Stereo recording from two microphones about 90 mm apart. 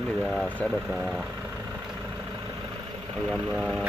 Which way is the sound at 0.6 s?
15° left (ahead or behind).